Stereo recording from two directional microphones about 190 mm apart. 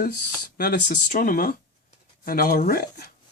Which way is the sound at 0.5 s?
50° left (ahead or behind).